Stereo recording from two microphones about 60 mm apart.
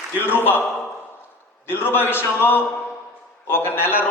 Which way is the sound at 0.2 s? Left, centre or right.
Left.